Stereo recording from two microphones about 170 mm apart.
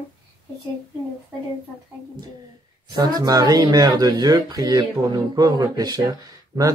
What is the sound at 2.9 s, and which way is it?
Speech, 25° right (ahead or behind).